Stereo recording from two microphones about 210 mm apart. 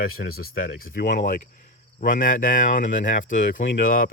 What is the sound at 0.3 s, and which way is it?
Speech, 45° left (ahead or behind).